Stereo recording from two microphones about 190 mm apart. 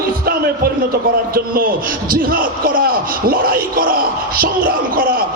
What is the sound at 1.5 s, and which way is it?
A man's voice, 50° right (ahead or behind).